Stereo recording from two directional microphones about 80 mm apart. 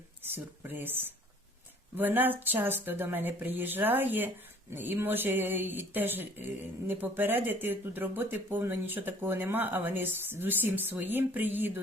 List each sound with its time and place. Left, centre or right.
0.3 s speech: right